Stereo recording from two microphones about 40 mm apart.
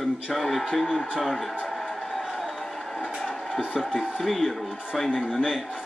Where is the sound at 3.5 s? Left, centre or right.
Centre.